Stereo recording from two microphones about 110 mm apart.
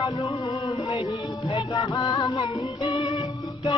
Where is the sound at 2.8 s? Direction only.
45° left (ahead or behind).